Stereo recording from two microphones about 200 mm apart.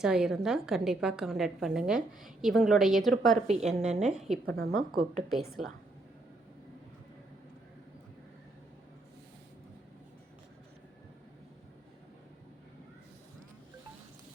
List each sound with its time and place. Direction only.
0.0 s a woman's voice: 5° right (ahead or behind)
3.4 s a woman's voice: 35° right (ahead or behind)
3.7 s a woman's voice: 5° right (ahead or behind)
4.4 s a woman's voice: 50° right (ahead or behind)
4.9 s a woman's voice: centre (ahead or behind)